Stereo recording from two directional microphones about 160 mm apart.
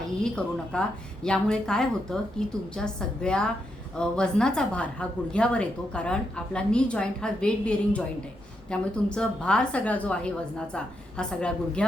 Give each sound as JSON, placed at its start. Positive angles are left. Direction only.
{"t": 0.2, "sound": "a woman's voice", "side_deg": 5}